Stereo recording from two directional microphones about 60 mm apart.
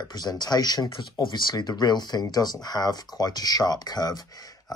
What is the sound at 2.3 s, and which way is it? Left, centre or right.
Speech, left.